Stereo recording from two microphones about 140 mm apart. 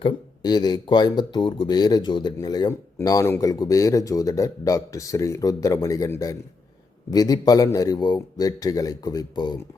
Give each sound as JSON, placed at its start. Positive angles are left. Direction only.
{"t": 0.0, "sound": "speech", "side_deg": 30}